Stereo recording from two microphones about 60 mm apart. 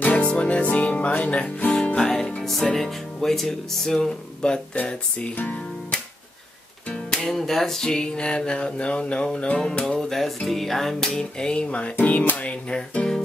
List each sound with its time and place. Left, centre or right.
0.0 s music: left
0.3 s speech: centre
1.9 s music: centre
2.4 s speech: centre
7.1 s music: centre
9.8 s music: centre